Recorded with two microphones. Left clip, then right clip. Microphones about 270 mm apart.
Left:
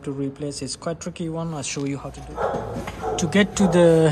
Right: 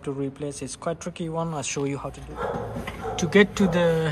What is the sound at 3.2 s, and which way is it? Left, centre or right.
Speech, centre.